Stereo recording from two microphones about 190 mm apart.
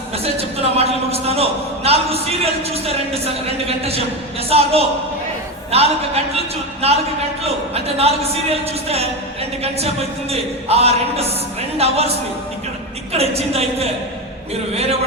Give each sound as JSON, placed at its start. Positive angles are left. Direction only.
{"t": 0.2, "sound": "a man's voice", "side_deg": -30}
{"t": 13.1, "sound": "a man's voice", "side_deg": -30}